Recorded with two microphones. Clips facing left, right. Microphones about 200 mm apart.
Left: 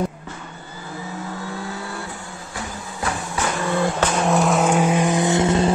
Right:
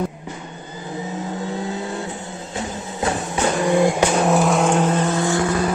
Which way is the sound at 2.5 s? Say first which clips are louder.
Right 4 dB; 25° right (ahead or behind).